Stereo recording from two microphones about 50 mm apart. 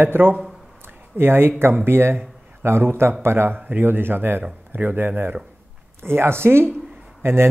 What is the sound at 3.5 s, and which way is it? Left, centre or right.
A man's voice, right.